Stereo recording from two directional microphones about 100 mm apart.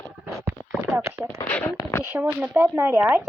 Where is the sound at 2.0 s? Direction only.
15° right (ahead or behind).